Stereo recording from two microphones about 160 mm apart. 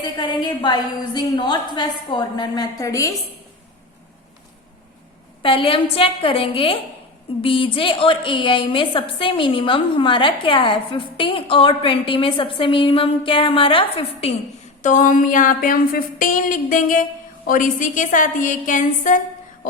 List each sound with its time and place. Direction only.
0.0 s a woman's voice: 30° left (ahead or behind)
5.4 s a woman's voice: 35° left (ahead or behind)
14.8 s a sound: 50° left (ahead or behind)